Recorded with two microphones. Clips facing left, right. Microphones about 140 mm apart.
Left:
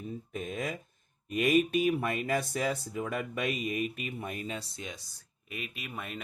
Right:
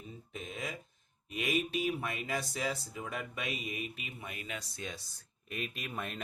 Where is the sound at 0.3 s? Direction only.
55° left (ahead or behind).